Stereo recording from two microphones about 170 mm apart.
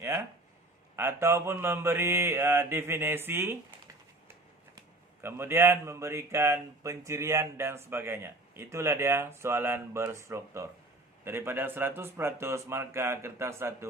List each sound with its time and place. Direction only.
0.0 s a sound: 15° right (ahead or behind)
0.9 s speech: 15° right (ahead or behind)
5.2 s speech: 15° right (ahead or behind)